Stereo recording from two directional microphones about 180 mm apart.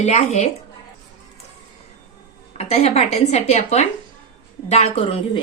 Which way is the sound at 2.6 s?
35° left (ahead or behind).